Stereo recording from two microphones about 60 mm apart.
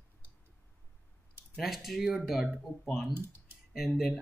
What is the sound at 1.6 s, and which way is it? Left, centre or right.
Speech, centre.